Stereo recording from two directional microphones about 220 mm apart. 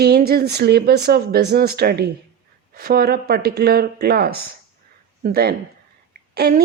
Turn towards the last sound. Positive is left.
turn(degrees=-45)  # may be behind; listen again after turning